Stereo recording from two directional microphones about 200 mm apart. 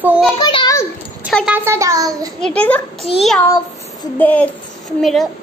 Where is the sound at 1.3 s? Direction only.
5° right (ahead or behind).